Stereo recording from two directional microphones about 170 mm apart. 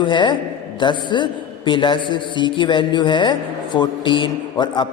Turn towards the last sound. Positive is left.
turn(degrees=30)  # may be behind; listen again after turning